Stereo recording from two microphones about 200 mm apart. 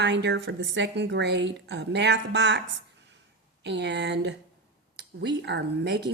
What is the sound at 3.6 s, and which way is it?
A woman's voice, 60° right (ahead or behind).